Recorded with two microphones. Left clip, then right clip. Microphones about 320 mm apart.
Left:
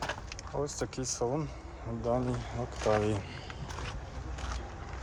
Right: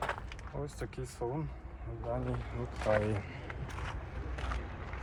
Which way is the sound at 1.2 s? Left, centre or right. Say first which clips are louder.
Left 5 dB; left.